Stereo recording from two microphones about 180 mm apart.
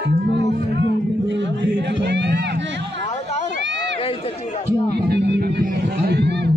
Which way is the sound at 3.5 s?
80° right.